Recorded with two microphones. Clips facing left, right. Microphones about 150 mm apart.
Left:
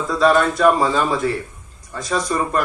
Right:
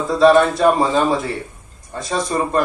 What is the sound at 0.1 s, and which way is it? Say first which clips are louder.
Speech: right 4 dB; 25° right (ahead or behind).